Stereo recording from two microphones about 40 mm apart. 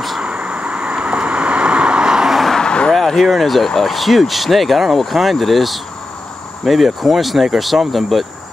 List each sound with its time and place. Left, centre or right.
0.2 s vehicle: right
2.5 s vehicle: left
2.9 s speech: centre